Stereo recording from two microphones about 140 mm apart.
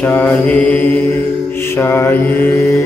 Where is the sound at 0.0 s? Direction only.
15° left (ahead or behind).